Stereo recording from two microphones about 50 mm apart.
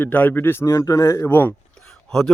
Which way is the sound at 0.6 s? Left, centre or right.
Left.